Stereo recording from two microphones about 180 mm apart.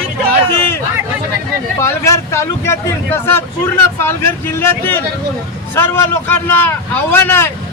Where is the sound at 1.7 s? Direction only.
15° left (ahead or behind).